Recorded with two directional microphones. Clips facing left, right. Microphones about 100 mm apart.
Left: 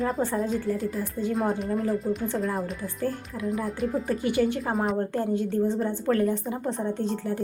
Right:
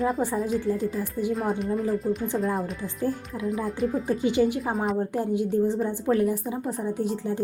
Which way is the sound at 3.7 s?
Centre (ahead or behind).